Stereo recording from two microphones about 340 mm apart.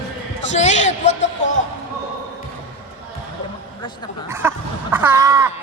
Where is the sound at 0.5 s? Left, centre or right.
Left.